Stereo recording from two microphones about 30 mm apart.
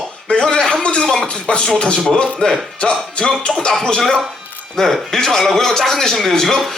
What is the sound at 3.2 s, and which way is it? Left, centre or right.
Music, left.